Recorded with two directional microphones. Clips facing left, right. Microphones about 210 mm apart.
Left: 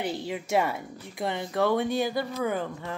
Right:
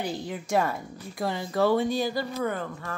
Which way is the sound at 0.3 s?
5° left (ahead or behind).